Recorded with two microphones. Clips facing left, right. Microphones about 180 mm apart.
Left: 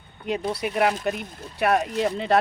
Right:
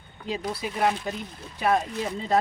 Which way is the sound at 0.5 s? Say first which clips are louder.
Left 2 dB; 65° left (ahead or behind).